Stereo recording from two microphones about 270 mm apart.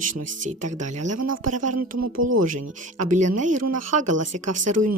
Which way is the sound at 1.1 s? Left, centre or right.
Right.